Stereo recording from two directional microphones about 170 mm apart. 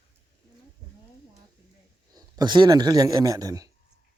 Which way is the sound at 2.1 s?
25° right (ahead or behind).